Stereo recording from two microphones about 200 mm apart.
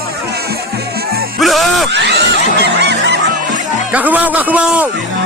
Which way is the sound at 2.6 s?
55° right (ahead or behind).